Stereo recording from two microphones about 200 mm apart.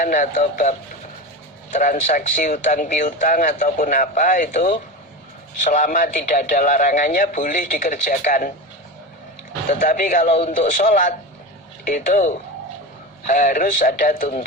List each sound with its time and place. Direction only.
0.0 s speech: 40° left (ahead or behind)
9.6 s speech: 40° left (ahead or behind)